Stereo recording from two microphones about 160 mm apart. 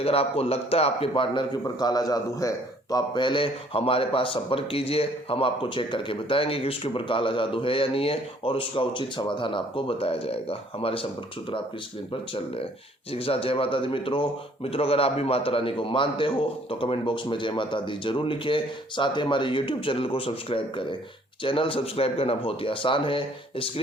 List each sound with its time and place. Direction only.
0.0 s speech: 40° left (ahead or behind)
13.1 s speech: 35° left (ahead or behind)